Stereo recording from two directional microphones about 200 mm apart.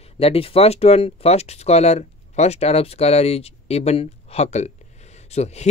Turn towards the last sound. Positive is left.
turn(degrees=35)  # may be behind; listen again after turning